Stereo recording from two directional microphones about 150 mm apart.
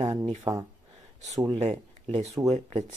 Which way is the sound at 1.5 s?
45° right (ahead or behind).